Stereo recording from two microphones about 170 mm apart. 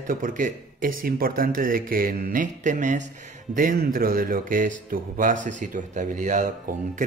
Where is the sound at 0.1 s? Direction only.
50° right (ahead or behind).